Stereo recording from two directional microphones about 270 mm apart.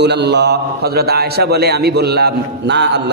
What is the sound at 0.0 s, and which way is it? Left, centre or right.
A man's voice, right.